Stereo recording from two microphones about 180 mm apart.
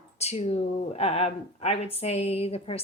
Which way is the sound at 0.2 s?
35° left (ahead or behind).